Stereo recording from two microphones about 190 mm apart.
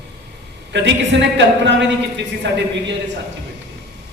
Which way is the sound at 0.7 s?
70° right (ahead or behind).